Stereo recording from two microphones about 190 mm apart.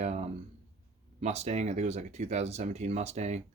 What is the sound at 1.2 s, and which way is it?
Speech, 35° right (ahead or behind).